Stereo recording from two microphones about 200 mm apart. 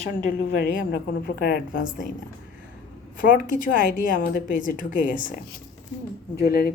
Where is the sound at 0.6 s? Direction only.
50° left (ahead or behind).